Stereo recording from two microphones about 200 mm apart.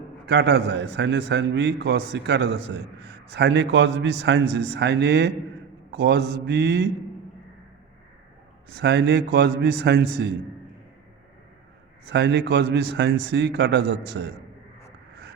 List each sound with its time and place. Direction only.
0.3 s a man's voice: 55° right (ahead or behind)
8.7 s a man's voice: 60° right (ahead or behind)
12.0 s a man's voice: 60° right (ahead or behind)